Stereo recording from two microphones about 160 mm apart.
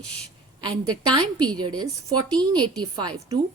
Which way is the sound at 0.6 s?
25° right (ahead or behind).